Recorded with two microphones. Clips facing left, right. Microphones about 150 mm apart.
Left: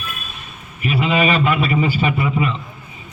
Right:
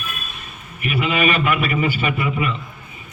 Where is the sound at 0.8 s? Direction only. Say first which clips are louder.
Left 2 dB; 30° left (ahead or behind).